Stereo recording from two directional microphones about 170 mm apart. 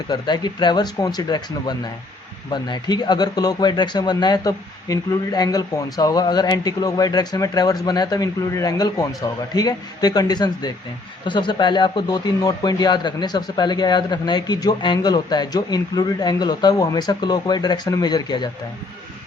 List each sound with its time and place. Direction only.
0.1 s speech: 25° left (ahead or behind)